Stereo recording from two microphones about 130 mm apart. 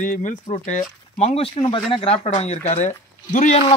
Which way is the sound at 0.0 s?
90° left.